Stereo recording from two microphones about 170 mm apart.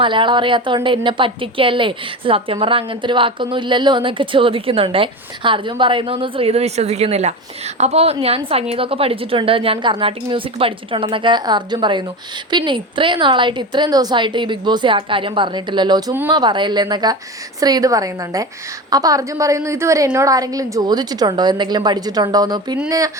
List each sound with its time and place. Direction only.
0.0 s a woman's voice: 30° right (ahead or behind)